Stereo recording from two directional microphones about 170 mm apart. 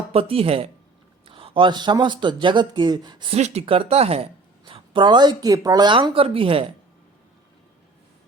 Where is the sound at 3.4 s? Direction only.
40° right (ahead or behind).